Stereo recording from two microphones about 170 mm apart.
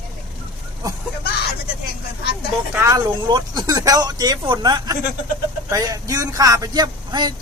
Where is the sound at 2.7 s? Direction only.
20° right (ahead or behind).